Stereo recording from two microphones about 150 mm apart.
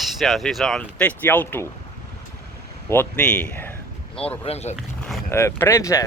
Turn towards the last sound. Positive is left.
turn(degrees=20)  # may be behind; listen again after turning